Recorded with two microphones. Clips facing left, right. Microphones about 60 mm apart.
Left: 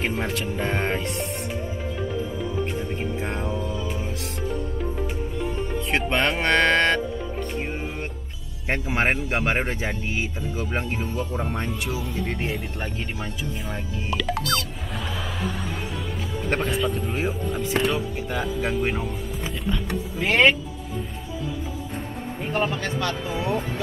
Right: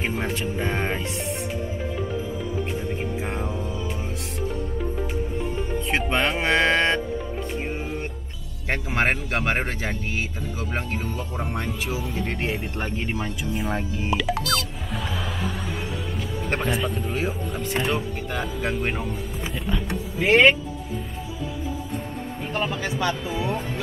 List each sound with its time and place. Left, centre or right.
0.2 s speech: centre
5.9 s speech: centre
8.6 s speech: centre
11.1 s speech: centre
13.7 s speech: right
14.1 s music: centre
16.4 s speech: centre
19.7 s power windows: centre
22.5 s speech: centre
22.8 s speech: centre
23.3 s speech: centre